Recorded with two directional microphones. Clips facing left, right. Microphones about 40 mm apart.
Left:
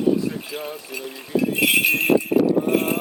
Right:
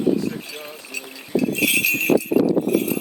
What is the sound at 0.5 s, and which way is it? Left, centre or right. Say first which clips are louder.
Speech: left 3 dB; centre.